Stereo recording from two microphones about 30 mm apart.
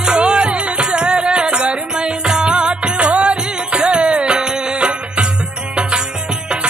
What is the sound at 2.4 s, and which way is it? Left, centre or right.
Music of bollywood, right.